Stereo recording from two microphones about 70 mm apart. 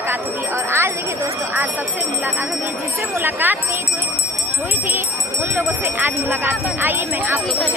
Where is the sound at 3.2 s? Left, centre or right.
Right.